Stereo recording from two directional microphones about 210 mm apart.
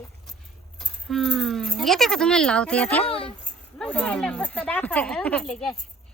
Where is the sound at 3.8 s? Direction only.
5° left (ahead or behind).